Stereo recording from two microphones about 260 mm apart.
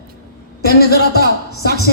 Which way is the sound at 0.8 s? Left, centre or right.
Left.